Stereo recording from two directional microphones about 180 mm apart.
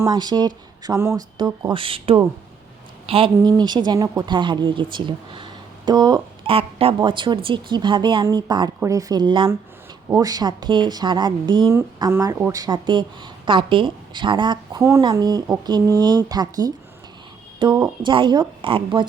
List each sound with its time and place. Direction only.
0.0 s speech: 20° right (ahead or behind)